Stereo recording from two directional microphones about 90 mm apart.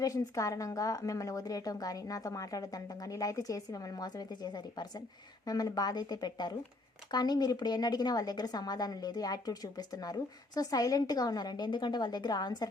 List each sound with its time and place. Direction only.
0.0 s a woman's voice: 40° left (ahead or behind)